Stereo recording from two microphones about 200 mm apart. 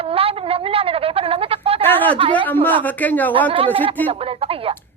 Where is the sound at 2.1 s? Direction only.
25° right (ahead or behind).